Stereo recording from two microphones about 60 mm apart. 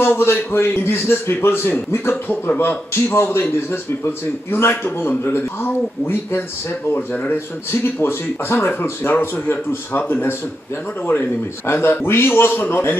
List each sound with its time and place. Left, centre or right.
0.0 s a man's voice: left
7.8 s a man's voice: left
11.6 s a man's voice: left